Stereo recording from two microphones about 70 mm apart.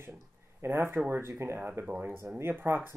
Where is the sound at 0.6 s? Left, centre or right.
Right.